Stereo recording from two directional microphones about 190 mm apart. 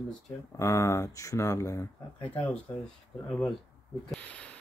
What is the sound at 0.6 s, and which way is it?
Speech, 15° left (ahead or behind).